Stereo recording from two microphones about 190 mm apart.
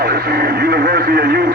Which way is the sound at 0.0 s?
55° right (ahead or behind).